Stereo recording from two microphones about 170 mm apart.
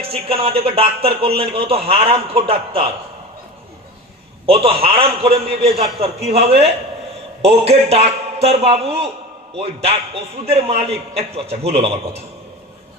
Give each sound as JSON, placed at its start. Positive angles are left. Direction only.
{"t": 0.1, "sound": "speech", "side_deg": -35}
{"t": 4.4, "sound": "speech", "side_deg": -35}